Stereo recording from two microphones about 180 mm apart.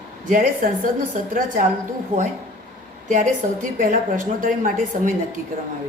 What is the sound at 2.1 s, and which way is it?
A woman's voice, 50° right (ahead or behind).